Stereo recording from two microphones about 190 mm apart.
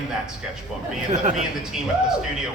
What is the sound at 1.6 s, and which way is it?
Speech, centre (ahead or behind).